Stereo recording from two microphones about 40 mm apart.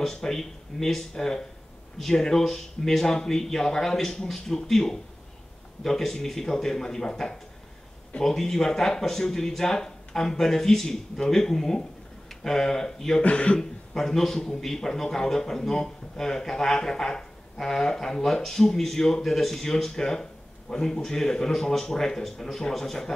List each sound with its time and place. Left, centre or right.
0.0 s a man's voice: centre
13.2 s speech: left
13.6 s a man's voice: centre